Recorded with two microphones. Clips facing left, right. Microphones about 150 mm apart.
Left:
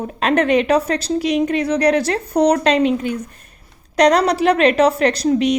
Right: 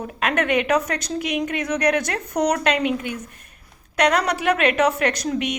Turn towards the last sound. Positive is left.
turn(degrees=30)  # may be behind; listen again after turning